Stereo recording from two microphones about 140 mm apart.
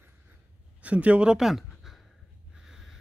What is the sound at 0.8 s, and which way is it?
A man's voice, 10° right (ahead or behind).